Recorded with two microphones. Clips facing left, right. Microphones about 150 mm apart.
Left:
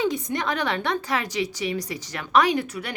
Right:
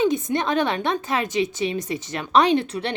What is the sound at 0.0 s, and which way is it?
A woman's voice, 20° right (ahead or behind).